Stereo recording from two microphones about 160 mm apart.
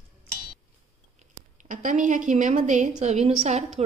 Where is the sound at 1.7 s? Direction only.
55° right (ahead or behind).